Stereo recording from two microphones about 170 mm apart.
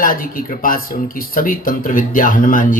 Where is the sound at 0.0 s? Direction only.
55° left (ahead or behind).